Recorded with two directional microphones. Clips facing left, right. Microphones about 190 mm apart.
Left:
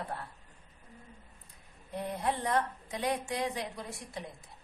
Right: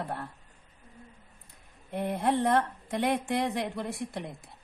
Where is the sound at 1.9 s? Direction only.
65° right (ahead or behind).